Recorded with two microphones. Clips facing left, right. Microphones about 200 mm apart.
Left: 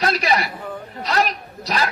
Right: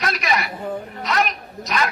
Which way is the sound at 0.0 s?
30° left (ahead or behind).